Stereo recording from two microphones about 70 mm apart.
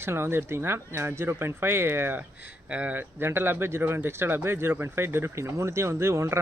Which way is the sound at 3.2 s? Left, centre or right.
Right.